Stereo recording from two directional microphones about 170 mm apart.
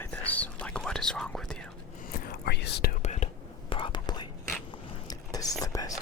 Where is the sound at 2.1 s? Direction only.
65° left (ahead or behind).